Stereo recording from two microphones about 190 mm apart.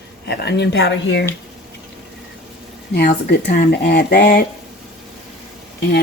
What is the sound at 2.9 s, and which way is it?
Speech, 60° left (ahead or behind).